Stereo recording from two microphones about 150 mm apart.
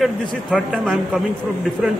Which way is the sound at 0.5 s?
Centre (ahead or behind).